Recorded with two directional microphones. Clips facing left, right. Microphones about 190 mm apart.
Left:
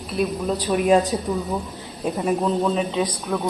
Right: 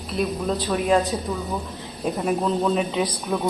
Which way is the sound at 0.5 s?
15° left (ahead or behind).